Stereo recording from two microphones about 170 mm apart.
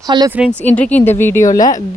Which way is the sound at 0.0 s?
25° right (ahead or behind).